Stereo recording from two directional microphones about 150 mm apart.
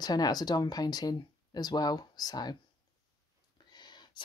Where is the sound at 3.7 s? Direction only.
30° left (ahead or behind).